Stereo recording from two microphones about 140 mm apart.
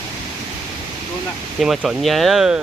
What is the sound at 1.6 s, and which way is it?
Speech, centre (ahead or behind).